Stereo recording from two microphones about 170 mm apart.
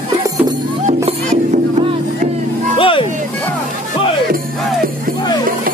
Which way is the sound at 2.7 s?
30° left (ahead or behind).